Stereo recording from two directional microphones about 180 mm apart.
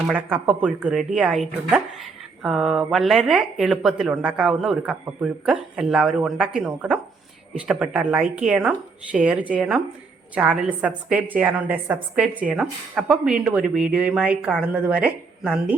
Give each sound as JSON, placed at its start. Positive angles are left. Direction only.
{"t": 0.1, "sound": "a woman's voice", "side_deg": -10}